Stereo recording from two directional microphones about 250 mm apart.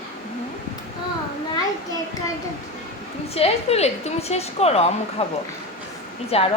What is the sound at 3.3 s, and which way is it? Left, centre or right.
A woman's voice, left.